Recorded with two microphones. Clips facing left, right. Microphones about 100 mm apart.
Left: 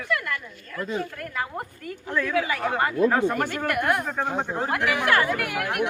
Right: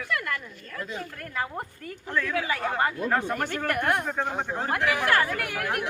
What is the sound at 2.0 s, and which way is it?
A man's voice, 10° left (ahead or behind).